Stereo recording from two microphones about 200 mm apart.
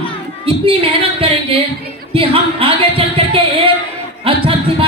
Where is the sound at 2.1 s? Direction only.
25° right (ahead or behind).